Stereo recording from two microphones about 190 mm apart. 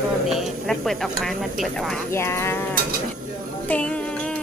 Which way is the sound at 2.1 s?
15° left (ahead or behind).